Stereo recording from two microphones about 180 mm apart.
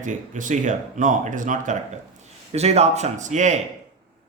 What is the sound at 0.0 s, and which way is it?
Speech, 45° right (ahead or behind).